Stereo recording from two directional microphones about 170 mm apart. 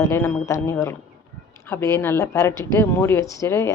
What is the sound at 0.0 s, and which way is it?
A woman's voice, 15° left (ahead or behind).